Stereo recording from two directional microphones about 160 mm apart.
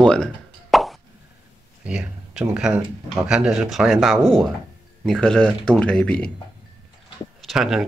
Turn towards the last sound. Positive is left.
turn(degrees=-5)  # may be behind; listen again after turning